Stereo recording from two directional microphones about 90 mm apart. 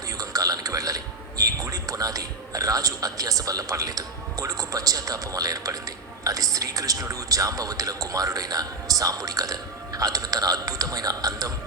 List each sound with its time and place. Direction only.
0.2 s a man's voice: 40° right (ahead or behind)